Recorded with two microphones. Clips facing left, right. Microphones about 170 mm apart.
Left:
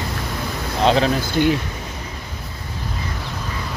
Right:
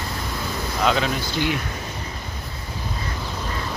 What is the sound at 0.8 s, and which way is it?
Speech, 35° left (ahead or behind).